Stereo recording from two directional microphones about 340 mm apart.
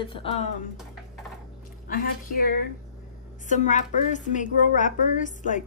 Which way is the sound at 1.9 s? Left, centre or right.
Left.